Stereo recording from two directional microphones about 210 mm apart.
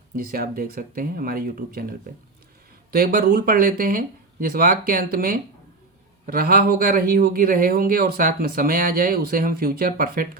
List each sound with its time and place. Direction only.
0.2 s speech: 45° right (ahead or behind)